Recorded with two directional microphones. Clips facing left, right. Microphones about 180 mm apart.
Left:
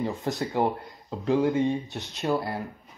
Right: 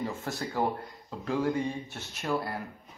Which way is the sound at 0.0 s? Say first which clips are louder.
Left 5 dB; 20° left (ahead or behind).